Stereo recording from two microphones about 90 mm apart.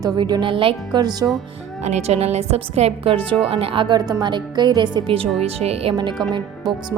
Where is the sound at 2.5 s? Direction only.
90° right; by 4.0 s 65° right (ahead or behind).